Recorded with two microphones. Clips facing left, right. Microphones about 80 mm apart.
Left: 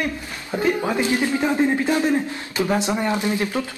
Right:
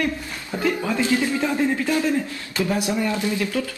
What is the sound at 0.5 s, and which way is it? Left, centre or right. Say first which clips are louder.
A man's voice: left 2 dB; left.